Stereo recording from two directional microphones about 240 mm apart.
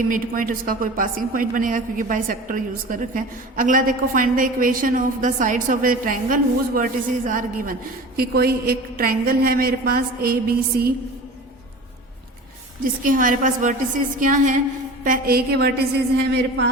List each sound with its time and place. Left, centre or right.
0.1 s a woman's voice: right
12.8 s a woman's voice: right